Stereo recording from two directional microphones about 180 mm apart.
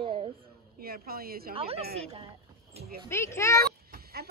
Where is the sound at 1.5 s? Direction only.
35° right (ahead or behind).